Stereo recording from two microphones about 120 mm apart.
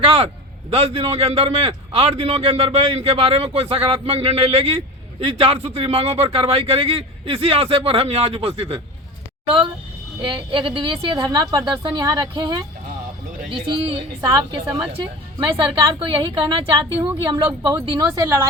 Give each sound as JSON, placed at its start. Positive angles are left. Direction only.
{"t": 0.0, "sound": "a man's voice", "side_deg": -50}
{"t": 10.2, "sound": "a woman's voice", "side_deg": -45}
{"t": 15.4, "sound": "a woman's voice", "side_deg": -40}